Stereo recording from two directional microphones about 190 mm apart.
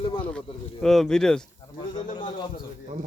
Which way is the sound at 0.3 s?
Centre (ahead or behind).